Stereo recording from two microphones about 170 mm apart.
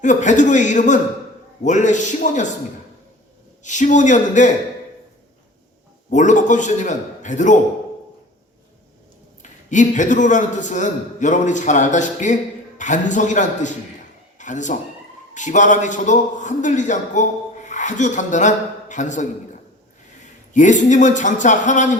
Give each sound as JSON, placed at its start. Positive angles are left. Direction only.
{"t": 0.0, "sound": "a man's voice", "side_deg": 45}
{"t": 3.6, "sound": "a man's voice", "side_deg": 45}
{"t": 6.1, "sound": "a man's voice", "side_deg": 45}
{"t": 9.4, "sound": "a man's voice", "side_deg": 45}
{"t": 20.5, "sound": "a man's voice", "side_deg": 45}